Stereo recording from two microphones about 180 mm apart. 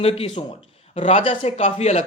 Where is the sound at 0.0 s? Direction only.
35° left (ahead or behind).